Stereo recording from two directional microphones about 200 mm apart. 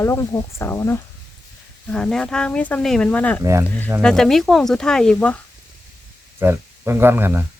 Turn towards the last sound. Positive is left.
turn(degrees=-10)  # may be behind; listen again after turning